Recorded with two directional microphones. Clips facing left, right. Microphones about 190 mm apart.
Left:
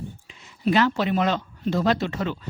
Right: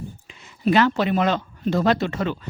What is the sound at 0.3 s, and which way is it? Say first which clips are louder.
Speech: right 2 dB; 60° right (ahead or behind).